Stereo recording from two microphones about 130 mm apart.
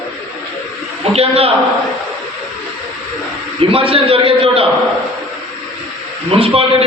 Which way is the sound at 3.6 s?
45° right (ahead or behind).